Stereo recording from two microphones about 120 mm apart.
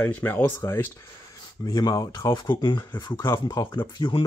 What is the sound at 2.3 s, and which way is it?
Speech, 40° left (ahead or behind).